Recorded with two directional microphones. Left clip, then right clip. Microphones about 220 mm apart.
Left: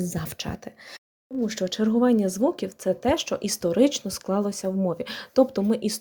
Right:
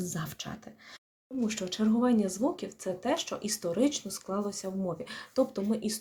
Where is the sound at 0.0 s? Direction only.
30° left (ahead or behind).